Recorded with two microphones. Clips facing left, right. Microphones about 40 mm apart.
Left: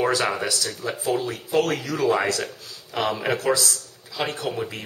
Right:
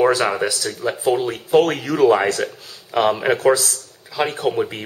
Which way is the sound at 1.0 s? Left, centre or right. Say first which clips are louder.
Right 5 dB; right.